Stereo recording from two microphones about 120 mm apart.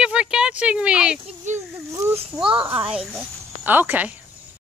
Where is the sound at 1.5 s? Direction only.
20° right (ahead or behind).